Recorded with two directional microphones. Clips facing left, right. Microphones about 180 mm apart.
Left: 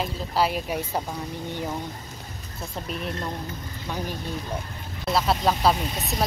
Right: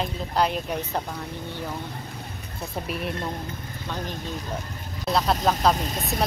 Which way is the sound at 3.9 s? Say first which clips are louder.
Left 1 dB; 10° left (ahead or behind).